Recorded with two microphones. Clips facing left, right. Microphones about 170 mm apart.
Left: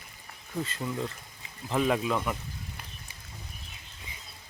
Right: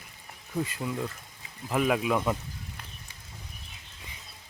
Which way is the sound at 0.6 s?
10° right (ahead or behind).